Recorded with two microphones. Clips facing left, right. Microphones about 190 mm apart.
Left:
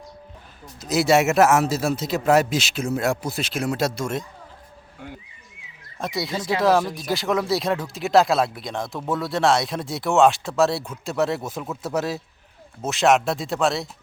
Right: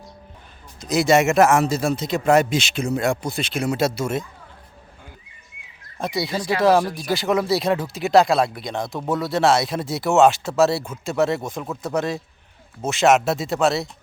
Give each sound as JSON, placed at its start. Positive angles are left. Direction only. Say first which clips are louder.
{"t": 0.8, "sound": "speech", "louder": "right 1 dB", "side_deg": 5}
{"t": 6.0, "sound": "speech", "louder": "right 2 dB", "side_deg": 0}